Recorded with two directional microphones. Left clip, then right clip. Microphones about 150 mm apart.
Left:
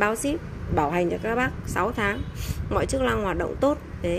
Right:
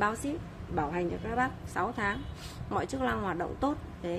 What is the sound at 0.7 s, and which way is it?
A woman's voice, 20° left (ahead or behind).